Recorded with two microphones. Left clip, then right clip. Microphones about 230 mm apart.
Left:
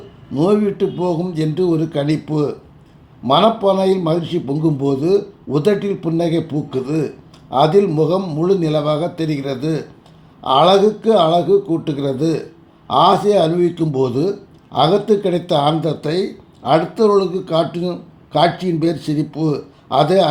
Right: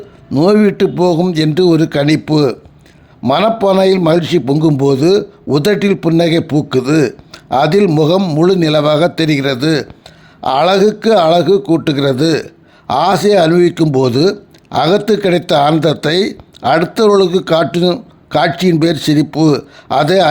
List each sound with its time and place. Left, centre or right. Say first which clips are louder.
0.3 s speech: right 6 dB; right